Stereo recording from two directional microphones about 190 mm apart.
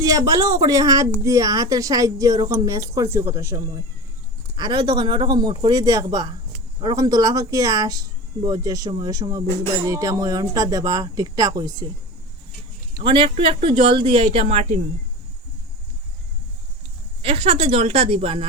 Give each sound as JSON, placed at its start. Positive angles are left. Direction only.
{"t": 0.0, "sound": "a woman's voice", "side_deg": -15}
{"t": 13.0, "sound": "speech", "side_deg": -25}
{"t": 17.2, "sound": "speech", "side_deg": -30}